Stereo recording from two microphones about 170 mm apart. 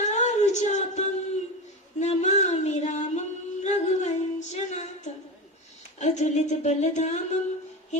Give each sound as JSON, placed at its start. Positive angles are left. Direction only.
{"t": 0.0, "sound": "a sound", "side_deg": 45}
{"t": 2.0, "sound": "singing", "side_deg": 40}
{"t": 6.0, "sound": "speech", "side_deg": 45}